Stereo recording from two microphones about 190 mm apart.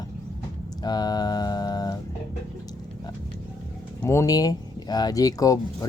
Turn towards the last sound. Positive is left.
turn(degrees=20)  # may be behind; listen again after turning